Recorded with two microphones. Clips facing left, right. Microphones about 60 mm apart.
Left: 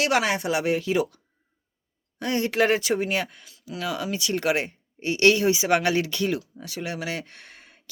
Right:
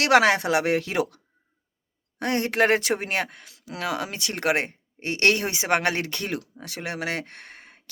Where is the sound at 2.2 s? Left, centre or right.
Right.